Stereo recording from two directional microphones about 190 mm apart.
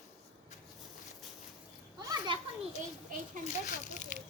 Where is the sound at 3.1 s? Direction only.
45° right (ahead or behind).